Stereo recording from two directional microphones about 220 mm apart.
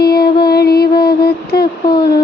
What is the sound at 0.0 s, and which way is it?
Music, 45° left (ahead or behind).